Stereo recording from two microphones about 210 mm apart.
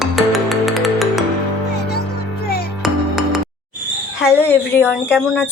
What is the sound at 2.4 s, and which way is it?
Music, 50° left (ahead or behind).